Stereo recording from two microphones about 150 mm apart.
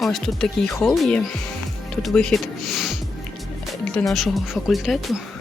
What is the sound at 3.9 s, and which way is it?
Speech, 5° left (ahead or behind).